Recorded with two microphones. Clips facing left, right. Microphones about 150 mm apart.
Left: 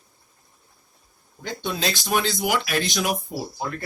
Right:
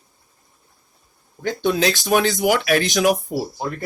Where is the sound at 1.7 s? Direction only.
60° right (ahead or behind).